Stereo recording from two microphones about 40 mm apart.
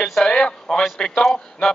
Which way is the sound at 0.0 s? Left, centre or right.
Centre.